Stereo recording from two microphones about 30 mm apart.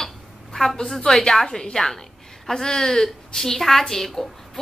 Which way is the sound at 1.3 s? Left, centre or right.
Left.